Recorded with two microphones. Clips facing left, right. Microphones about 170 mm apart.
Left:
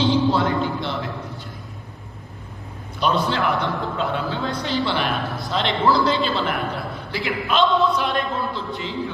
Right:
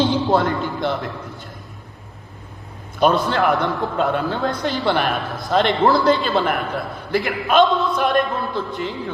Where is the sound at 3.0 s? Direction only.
50° right (ahead or behind).